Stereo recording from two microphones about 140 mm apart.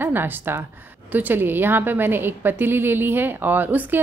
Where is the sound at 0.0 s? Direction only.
15° right (ahead or behind).